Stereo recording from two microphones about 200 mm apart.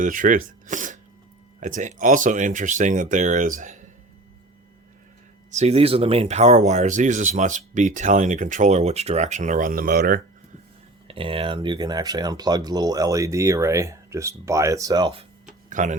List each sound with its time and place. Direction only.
0.0 s speech: 40° right (ahead or behind)
5.5 s speech: 35° right (ahead or behind)
11.1 s speech: 25° right (ahead or behind)
15.7 s speech: 40° right (ahead or behind)